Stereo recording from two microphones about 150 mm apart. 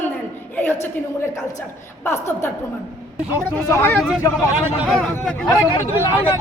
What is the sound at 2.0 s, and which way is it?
Speech, 15° left (ahead or behind).